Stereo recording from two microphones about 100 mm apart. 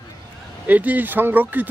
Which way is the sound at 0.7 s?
15° right (ahead or behind).